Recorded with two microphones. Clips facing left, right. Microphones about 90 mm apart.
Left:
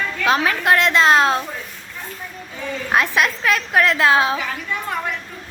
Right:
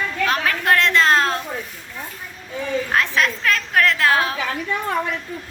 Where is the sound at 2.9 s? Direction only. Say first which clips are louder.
Left 4 dB; 15° left (ahead or behind).